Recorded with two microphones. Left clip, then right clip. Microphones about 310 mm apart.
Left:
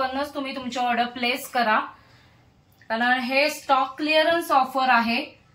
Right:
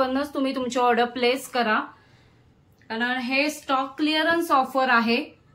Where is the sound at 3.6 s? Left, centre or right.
Centre.